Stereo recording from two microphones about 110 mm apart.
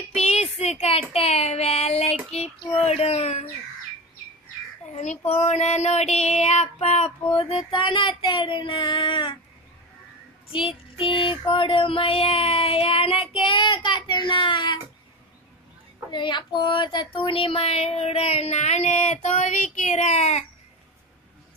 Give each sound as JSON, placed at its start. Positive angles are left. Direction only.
{"t": 0.1, "sound": "child singing", "side_deg": 70}
{"t": 2.9, "sound": "a sound", "side_deg": 70}
{"t": 4.9, "sound": "child singing", "side_deg": 85}
{"t": 10.5, "sound": "child singing", "side_deg": 55}
{"t": 16.1, "sound": "speech", "side_deg": 45}
{"t": 16.6, "sound": "child singing", "side_deg": 45}